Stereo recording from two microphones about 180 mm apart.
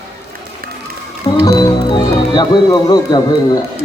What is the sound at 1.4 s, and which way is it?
Speech, 20° left (ahead or behind).